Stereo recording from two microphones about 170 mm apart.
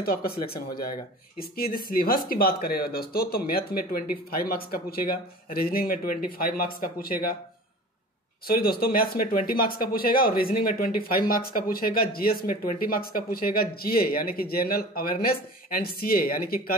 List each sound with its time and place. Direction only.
0.0 s speech: 65° left (ahead or behind)
8.5 s speech: 60° left (ahead or behind)